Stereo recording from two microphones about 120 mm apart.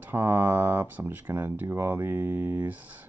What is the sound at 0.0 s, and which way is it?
Speech, 15° right (ahead or behind).